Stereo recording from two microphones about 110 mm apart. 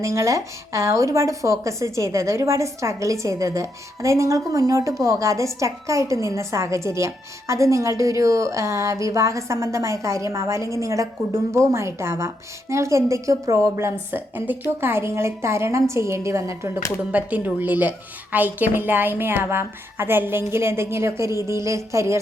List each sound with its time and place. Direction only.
0.0 s speech: 25° right (ahead or behind)
17.1 s speech: 15° right (ahead or behind)